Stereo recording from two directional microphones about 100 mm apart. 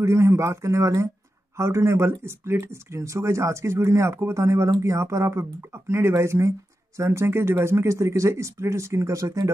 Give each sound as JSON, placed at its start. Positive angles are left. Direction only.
{"t": 0.0, "sound": "speech", "side_deg": -30}